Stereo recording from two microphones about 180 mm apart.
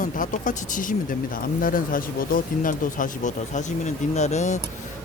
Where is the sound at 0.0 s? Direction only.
45° left (ahead or behind).